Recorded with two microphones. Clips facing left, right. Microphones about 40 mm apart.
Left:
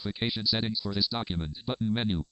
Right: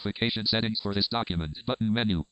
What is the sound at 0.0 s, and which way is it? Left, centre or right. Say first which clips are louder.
Speech: right 2 dB; right.